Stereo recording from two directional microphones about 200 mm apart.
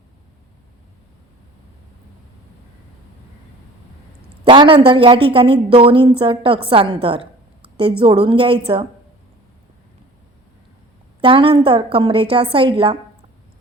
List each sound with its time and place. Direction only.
4.4 s a woman's voice: 25° right (ahead or behind)
11.2 s a woman's voice: 25° right (ahead or behind)